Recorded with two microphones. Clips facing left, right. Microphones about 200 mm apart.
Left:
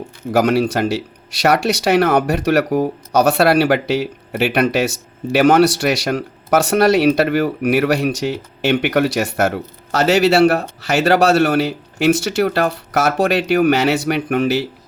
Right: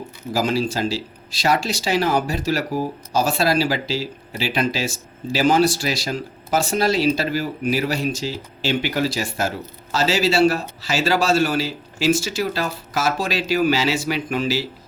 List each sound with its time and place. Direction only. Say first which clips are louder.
0.3 s speech: left 6 dB; 65° left (ahead or behind)